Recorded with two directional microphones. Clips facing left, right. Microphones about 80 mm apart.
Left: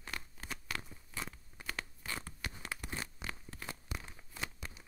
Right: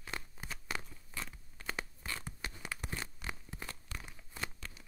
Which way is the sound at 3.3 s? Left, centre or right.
Centre.